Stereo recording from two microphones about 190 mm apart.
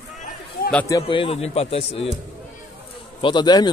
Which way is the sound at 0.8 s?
20° left (ahead or behind).